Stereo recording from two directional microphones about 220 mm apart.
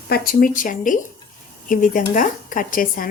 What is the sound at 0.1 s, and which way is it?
Speech, 40° left (ahead or behind).